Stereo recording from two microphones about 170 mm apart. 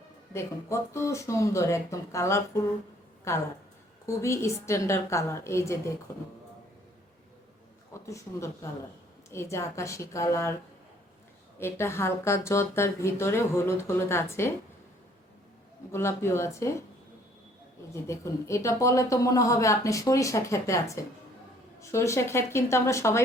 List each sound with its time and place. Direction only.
0.3 s speech: 15° left (ahead or behind)
8.0 s speech: 15° left (ahead or behind)
11.6 s speech: 15° left (ahead or behind)
15.9 s speech: 15° left (ahead or behind)
17.9 s speech: 15° left (ahead or behind)